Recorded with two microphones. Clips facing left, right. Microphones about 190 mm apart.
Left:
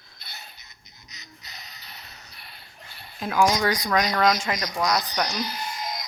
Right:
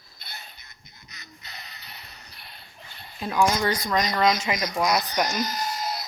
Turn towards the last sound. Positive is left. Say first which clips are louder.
# right 3 dB
turn(degrees=-40)  # may be behind; listen again after turning